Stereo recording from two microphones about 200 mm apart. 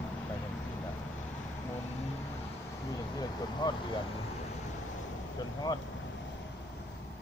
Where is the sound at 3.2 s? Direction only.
20° left (ahead or behind).